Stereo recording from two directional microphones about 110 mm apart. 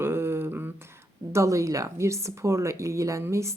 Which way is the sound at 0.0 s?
20° right (ahead or behind).